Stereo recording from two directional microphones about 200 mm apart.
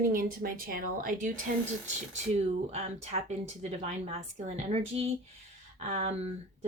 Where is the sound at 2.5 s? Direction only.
30° right (ahead or behind).